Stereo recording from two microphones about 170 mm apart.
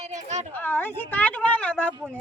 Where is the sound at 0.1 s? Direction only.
40° right (ahead or behind).